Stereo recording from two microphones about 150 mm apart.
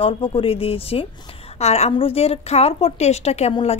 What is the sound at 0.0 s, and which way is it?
A woman's voice, 35° left (ahead or behind).